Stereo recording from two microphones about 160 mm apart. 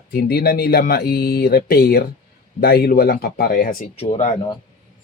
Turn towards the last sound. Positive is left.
turn(degrees=40)  # may be behind; listen again after turning